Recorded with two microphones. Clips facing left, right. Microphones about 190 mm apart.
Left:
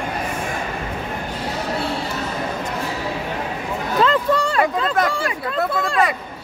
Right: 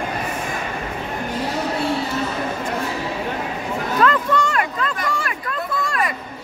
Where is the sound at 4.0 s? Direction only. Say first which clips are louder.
Left 1 dB; 30° left (ahead or behind).